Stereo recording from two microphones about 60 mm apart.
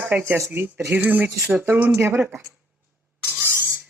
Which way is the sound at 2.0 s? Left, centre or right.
Right.